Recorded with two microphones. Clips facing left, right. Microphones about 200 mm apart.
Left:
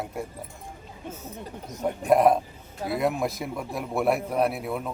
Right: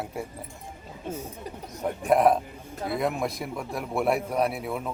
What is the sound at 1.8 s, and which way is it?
A man's voice, centre (ahead or behind).